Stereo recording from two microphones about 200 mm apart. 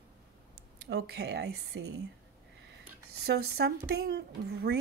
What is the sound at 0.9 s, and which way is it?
Speech, 55° right (ahead or behind).